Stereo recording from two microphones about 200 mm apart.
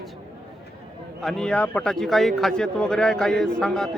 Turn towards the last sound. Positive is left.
turn(degrees=0)  # may be behind; listen again after turning